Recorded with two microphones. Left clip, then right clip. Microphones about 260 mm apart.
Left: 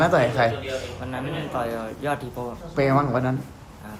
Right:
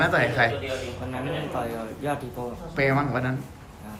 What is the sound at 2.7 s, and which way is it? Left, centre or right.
Speech, centre.